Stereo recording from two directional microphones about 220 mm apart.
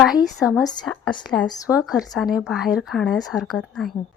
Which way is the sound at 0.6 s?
20° left (ahead or behind).